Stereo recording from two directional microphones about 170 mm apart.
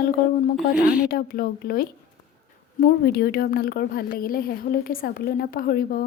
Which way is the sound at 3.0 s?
65° left (ahead or behind).